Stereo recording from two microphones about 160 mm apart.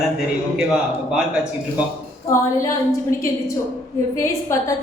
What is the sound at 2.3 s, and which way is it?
Speech, 15° left (ahead or behind).